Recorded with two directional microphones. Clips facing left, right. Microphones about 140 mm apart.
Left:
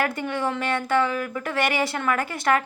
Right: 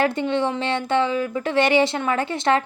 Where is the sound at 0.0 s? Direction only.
25° right (ahead or behind).